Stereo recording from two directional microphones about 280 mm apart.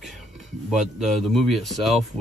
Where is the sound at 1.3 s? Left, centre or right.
Centre.